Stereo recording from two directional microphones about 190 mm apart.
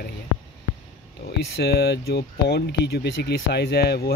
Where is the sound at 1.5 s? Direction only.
60° left (ahead or behind).